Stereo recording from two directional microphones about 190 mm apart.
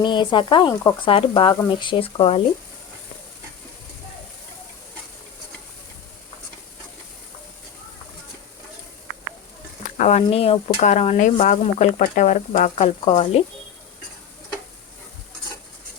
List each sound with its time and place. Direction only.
0.0 s speech: 25° left (ahead or behind)
10.0 s speech: 35° left (ahead or behind)